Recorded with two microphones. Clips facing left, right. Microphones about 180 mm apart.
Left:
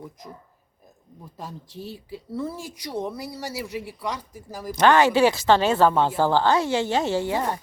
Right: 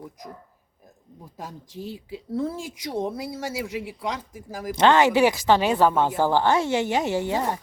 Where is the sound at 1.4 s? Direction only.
15° right (ahead or behind).